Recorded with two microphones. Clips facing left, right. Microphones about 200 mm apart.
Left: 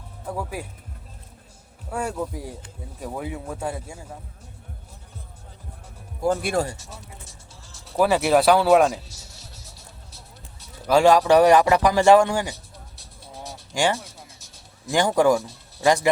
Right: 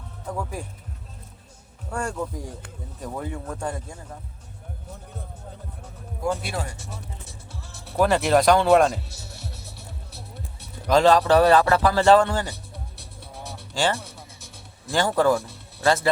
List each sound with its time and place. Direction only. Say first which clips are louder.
0.3 s a man's voice: left 1 dB; 5° left (ahead or behind)
1.9 s a man's voice: left 1 dB; 5° left (ahead or behind)
6.3 s speech: left 7 dB; 50° left (ahead or behind)
7.3 s music: right 6 dB; 60° right (ahead or behind)
7.9 s a man's voice: left 1 dB; 5° left (ahead or behind)
9.0 s music: right 7 dB; 60° right (ahead or behind)
10.8 s a man's voice: left 1 dB; 10° left (ahead or behind)
12.7 s music: right 5 dB; 60° right (ahead or behind)
14.8 s a man's voice: left 2 dB; 15° left (ahead or behind)